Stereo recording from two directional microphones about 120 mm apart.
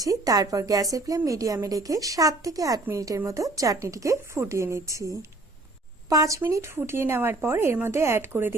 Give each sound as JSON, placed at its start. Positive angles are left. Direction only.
{"t": 0.0, "sound": "a woman's voice", "side_deg": -30}